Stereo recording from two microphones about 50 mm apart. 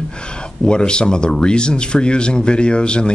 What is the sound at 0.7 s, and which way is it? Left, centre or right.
Speech, centre.